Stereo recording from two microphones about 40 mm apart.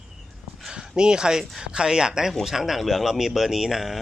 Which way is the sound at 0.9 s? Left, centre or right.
Centre.